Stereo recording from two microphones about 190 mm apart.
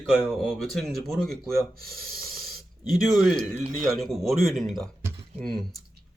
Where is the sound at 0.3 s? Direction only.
Centre (ahead or behind).